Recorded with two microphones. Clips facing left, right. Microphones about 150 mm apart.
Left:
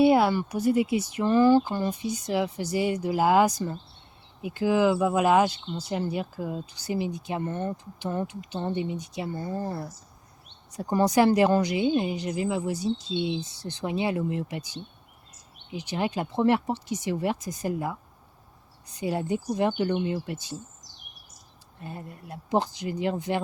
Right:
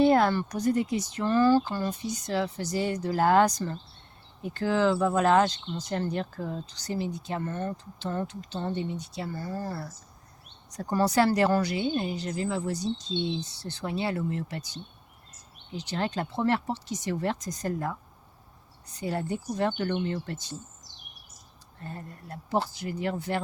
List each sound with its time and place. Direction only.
0.0 s speech: 10° left (ahead or behind)
18.9 s speech: 15° left (ahead or behind)
21.8 s speech: 15° left (ahead or behind)